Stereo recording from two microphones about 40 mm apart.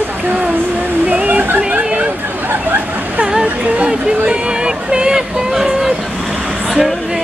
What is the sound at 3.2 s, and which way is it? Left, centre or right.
Speech, right.